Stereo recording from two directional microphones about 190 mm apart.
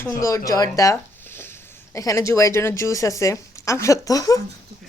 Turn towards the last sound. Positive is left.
turn(degrees=20)  # may be behind; listen again after turning